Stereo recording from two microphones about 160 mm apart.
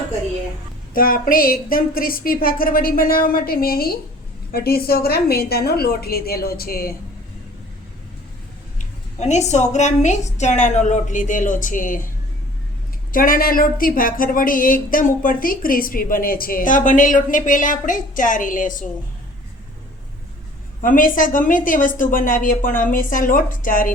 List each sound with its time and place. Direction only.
0.9 s a woman's voice: 65° left (ahead or behind)
8.8 s a woman's voice: 45° left (ahead or behind)
13.1 s speech: 60° left (ahead or behind)
20.8 s speech: 60° left (ahead or behind)